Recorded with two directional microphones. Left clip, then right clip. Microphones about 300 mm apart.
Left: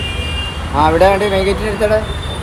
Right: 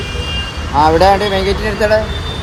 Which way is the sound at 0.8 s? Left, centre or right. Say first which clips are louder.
Right 1 dB; centre.